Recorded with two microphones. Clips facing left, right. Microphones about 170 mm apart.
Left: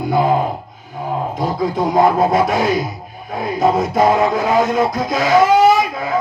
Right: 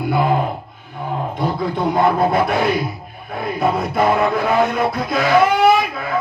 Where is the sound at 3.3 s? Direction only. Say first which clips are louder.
Left 3 dB; 60° right (ahead or behind).